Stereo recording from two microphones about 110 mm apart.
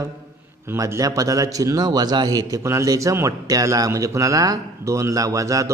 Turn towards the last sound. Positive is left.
turn(degrees=-30)  # may be behind; listen again after turning